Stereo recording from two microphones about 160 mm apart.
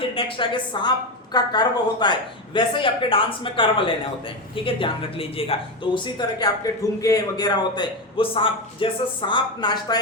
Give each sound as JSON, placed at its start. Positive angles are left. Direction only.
{"t": 0.1, "sound": "a woman's voice", "side_deg": 35}